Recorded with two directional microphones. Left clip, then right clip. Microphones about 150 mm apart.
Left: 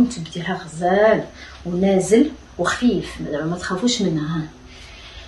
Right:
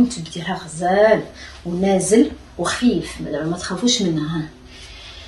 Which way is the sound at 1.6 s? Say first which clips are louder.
Even; 10° left (ahead or behind).